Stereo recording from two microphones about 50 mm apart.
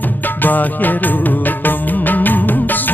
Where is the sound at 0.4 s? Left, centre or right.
Left.